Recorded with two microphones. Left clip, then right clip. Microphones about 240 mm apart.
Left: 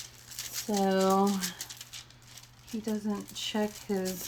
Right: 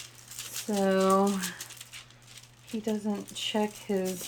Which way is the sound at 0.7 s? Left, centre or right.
Right.